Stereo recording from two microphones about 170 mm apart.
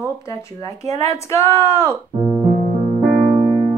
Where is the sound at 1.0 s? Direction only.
15° left (ahead or behind).